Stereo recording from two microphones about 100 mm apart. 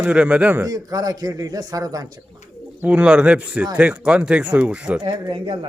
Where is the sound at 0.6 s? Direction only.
35° right (ahead or behind).